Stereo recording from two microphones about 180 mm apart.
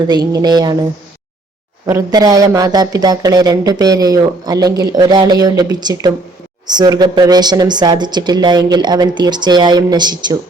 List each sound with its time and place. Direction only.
0.0 s speech: 25° right (ahead or behind)
1.9 s speech: 20° right (ahead or behind)